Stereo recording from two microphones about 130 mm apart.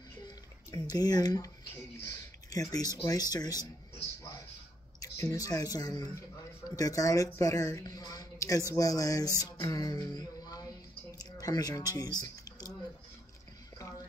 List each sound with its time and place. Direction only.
0.7 s speech: 30° left (ahead or behind)
5.0 s speech: 25° left (ahead or behind)
9.4 s music: 25° left (ahead or behind)
11.1 s a sound: 30° left (ahead or behind)